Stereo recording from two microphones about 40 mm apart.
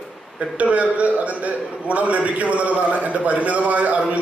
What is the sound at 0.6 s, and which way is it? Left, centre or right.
A man's voice, right.